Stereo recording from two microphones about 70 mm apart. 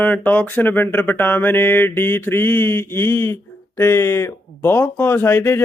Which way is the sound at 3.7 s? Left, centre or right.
Left.